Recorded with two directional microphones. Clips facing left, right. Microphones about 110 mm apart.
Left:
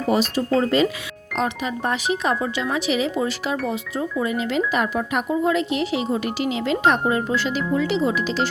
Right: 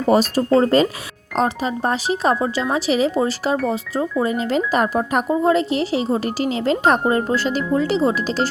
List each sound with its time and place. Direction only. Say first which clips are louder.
0.1 s speech: right 5 dB; 40° right (ahead or behind)